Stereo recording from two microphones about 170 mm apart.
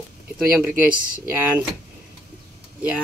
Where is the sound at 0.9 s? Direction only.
55° right (ahead or behind).